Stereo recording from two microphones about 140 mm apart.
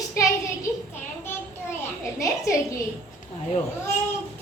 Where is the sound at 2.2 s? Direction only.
20° left (ahead or behind).